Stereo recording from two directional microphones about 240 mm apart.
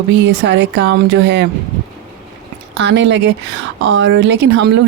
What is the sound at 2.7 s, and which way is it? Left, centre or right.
A woman's voice, right.